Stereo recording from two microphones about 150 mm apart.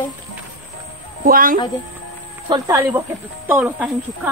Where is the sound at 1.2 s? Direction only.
70° right (ahead or behind).